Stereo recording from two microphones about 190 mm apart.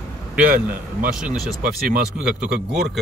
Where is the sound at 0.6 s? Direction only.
5° right (ahead or behind).